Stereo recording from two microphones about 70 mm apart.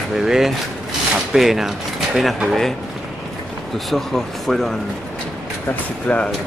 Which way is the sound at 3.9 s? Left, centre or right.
Centre.